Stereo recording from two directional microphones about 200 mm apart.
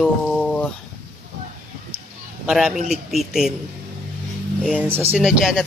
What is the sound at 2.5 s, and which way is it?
Speech, 5° right (ahead or behind).